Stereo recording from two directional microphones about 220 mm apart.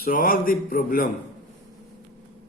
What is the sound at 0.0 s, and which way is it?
A man's voice, 40° left (ahead or behind).